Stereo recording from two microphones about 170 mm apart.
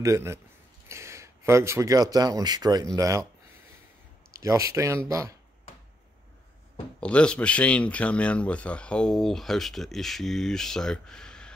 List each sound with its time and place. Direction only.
0.0 s speech: 15° right (ahead or behind)
4.3 s speech: 20° right (ahead or behind)
7.0 s speech: 5° left (ahead or behind)